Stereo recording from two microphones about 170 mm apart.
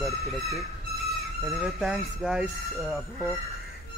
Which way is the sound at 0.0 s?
Centre (ahead or behind).